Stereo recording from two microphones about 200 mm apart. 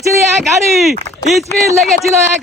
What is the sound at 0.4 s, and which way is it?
Speech, centre (ahead or behind).